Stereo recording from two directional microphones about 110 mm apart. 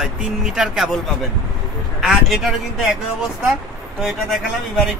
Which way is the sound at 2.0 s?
Centre (ahead or behind).